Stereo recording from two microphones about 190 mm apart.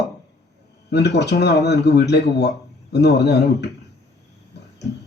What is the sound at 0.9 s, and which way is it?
A man's voice, 60° left (ahead or behind).